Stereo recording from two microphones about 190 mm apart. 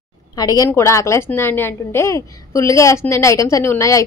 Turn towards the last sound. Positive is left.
turn(degrees=15)  # may be behind; listen again after turning